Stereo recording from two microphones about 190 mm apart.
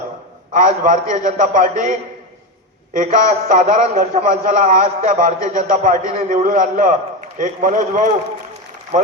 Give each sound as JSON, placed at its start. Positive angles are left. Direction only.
{"t": 0.5, "sound": "a man's voice", "side_deg": -45}